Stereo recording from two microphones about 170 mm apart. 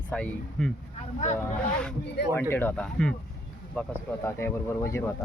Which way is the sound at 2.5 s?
10° left (ahead or behind).